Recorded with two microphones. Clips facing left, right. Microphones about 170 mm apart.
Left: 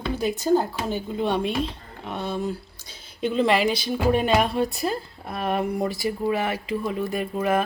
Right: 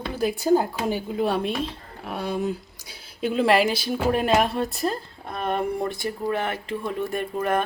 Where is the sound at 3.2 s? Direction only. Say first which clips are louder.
Right 1 dB; 5° right (ahead or behind).